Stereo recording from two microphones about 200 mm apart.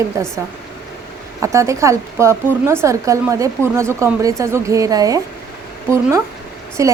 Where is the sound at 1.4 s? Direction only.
15° right (ahead or behind).